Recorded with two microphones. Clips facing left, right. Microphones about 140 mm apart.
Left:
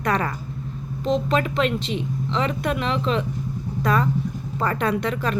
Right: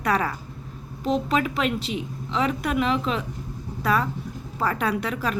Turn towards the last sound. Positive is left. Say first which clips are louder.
# left 3 dB
turn(degrees=-5)  # may be behind; listen again after turning